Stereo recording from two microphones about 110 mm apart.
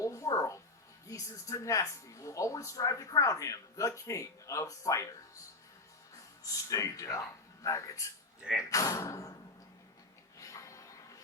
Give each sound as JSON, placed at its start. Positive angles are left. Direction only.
{"t": 0.0, "sound": "music", "side_deg": 30}
{"t": 1.0, "sound": "speech", "side_deg": 30}
{"t": 6.4, "sound": "speech", "side_deg": 30}
{"t": 8.4, "sound": "speech", "side_deg": -5}
{"t": 8.7, "sound": "speech", "side_deg": 30}
{"t": 10.3, "sound": "music", "side_deg": 30}